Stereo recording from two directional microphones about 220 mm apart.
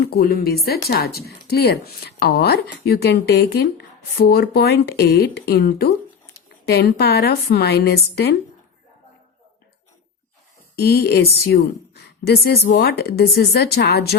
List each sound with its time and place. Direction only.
0.0 s speech: 45° left (ahead or behind)
10.8 s speech: 45° left (ahead or behind)